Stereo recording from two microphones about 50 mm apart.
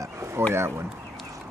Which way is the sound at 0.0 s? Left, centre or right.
Right.